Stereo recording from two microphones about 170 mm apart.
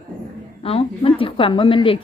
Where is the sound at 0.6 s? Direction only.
35° left (ahead or behind).